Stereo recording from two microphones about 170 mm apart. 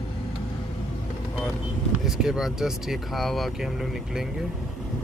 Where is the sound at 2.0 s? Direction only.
5° right (ahead or behind).